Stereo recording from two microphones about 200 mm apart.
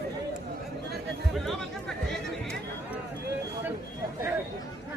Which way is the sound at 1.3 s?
Centre (ahead or behind).